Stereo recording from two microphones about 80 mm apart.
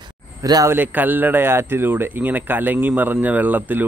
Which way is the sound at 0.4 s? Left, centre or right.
Right.